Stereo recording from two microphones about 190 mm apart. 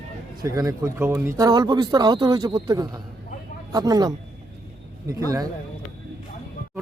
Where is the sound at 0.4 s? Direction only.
15° right (ahead or behind).